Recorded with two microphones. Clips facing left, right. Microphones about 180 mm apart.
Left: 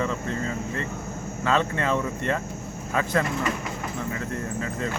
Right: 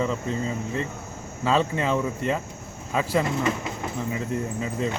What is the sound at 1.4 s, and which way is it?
Speech, 10° right (ahead or behind).